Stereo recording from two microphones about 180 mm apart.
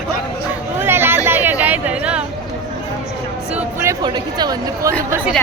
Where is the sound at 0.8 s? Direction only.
10° right (ahead or behind).